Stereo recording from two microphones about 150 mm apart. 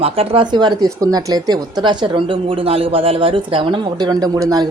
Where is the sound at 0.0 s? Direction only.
40° right (ahead or behind).